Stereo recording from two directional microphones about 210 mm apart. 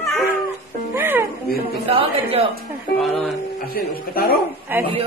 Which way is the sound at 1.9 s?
25° right (ahead or behind).